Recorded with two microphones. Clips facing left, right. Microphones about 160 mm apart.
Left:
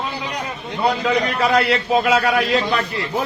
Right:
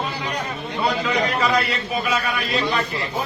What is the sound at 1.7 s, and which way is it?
A man's voice, 85° left.